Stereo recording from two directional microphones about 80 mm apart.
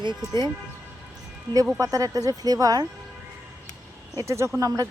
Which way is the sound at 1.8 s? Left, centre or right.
Right.